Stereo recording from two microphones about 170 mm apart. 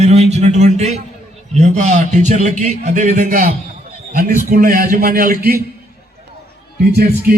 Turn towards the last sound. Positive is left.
turn(degrees=-65)  # may be behind; listen again after turning